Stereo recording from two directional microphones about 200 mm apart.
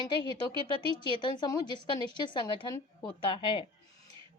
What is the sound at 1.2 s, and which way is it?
A woman's voice, 20° left (ahead or behind).